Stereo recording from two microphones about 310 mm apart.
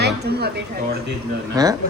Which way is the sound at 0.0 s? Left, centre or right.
Right.